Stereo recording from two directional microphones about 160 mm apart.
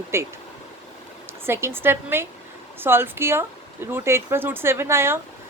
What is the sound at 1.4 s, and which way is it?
Speech, 15° right (ahead or behind).